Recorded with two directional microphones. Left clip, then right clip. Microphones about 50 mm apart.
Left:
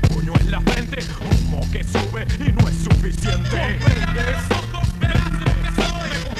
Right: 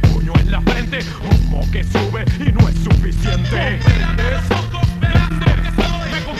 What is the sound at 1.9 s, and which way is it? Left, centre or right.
Music, left.